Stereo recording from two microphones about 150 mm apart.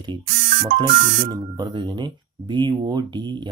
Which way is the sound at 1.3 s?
30° right (ahead or behind).